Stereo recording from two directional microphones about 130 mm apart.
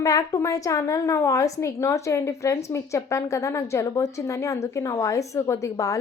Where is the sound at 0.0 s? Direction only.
25° left (ahead or behind).